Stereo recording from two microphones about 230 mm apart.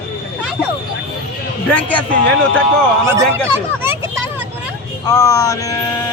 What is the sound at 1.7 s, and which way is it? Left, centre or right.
Speech, centre.